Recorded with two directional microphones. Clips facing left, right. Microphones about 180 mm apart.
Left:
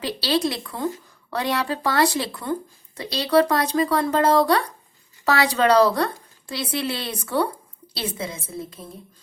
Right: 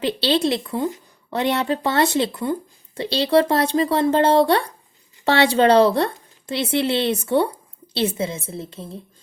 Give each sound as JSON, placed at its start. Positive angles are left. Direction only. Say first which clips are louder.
{"t": 0.0, "sound": "a woman's voice", "louder": "right 3 dB", "side_deg": -25}